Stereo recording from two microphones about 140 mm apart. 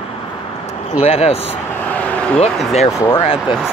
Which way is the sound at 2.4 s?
50° left (ahead or behind).